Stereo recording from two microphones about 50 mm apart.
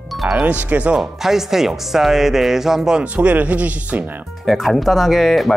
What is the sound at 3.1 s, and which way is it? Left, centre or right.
Speech, right.